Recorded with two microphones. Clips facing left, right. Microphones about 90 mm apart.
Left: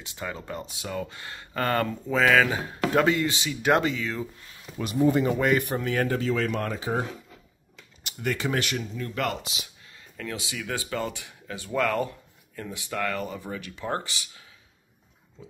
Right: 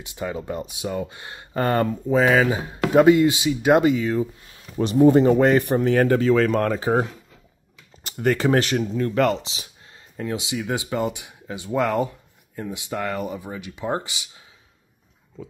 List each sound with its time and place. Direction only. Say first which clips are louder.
0.0 s speech: right 6 dB; 20° right (ahead or behind)
5.1 s speech: right 7 dB; 35° right (ahead or behind)
5.9 s speech: right 8 dB; 45° right (ahead or behind)
9.4 s speech: right 1 dB; 30° right (ahead or behind)